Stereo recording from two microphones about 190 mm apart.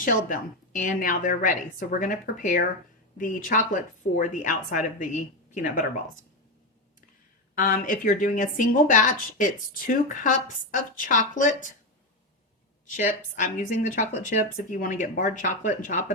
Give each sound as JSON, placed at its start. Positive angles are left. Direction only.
{"t": 0.0, "sound": "a woman's voice", "side_deg": 45}
{"t": 7.5, "sound": "a woman's voice", "side_deg": 45}
{"t": 13.4, "sound": "a woman's voice", "side_deg": 40}